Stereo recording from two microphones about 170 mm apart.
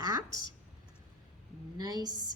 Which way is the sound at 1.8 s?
20° right (ahead or behind).